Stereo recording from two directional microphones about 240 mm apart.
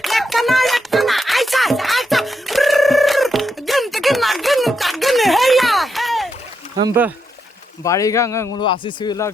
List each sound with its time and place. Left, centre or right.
0.0 s music: centre
6.7 s speech: centre
7.9 s speech: centre